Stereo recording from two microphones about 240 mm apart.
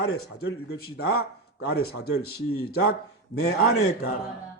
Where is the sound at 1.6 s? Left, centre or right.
Left.